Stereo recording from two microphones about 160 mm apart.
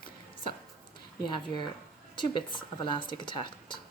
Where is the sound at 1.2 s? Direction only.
30° left (ahead or behind).